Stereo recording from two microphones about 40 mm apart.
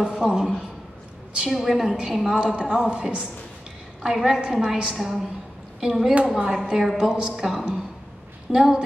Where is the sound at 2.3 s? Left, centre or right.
Right.